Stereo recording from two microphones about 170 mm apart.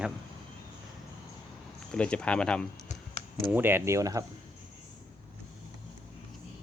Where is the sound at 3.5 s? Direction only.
10° right (ahead or behind).